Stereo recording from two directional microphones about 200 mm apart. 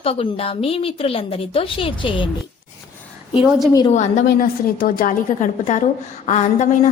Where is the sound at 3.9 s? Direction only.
35° left (ahead or behind).